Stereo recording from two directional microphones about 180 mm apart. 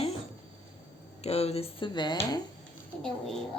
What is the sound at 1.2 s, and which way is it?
Speech, 35° left (ahead or behind).